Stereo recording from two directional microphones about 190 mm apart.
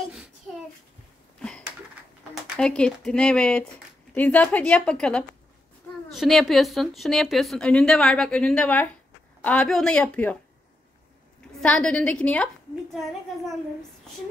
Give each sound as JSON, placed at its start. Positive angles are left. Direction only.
{"t": 2.4, "sound": "a woman's voice", "side_deg": 5}
{"t": 11.6, "sound": "speech", "side_deg": 5}